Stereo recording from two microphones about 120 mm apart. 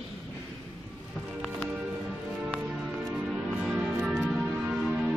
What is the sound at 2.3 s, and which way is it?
Music, 10° right (ahead or behind).